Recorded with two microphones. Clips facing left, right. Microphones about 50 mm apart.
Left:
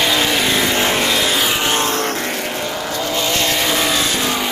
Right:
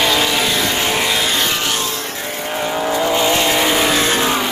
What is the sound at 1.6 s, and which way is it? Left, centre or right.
Vehicle, left.